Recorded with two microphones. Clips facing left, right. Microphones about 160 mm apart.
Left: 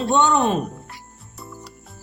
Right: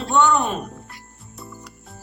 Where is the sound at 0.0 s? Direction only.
25° left (ahead or behind).